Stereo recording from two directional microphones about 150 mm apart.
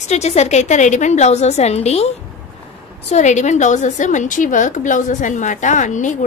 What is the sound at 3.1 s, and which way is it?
A woman's voice, 50° left (ahead or behind).